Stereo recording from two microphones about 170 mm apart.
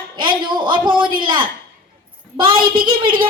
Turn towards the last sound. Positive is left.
turn(degrees=-30)  # may be behind; listen again after turning